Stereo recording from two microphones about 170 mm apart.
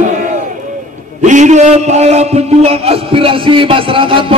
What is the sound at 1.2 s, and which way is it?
A man's voice, 45° right (ahead or behind).